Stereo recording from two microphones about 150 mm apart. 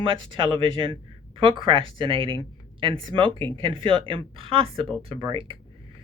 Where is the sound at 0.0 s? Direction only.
35° right (ahead or behind).